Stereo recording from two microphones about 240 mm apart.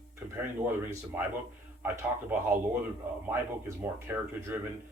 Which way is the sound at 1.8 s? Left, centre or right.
Centre.